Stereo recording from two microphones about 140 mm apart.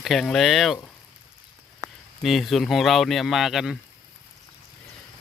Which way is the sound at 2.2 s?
Centre (ahead or behind).